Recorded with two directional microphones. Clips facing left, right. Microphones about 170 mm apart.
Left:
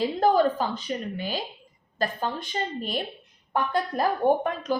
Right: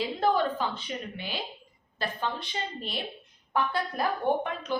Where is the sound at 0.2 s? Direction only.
40° left (ahead or behind).